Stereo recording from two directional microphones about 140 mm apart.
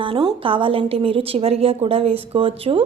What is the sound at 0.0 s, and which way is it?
A woman's voice, 35° right (ahead or behind).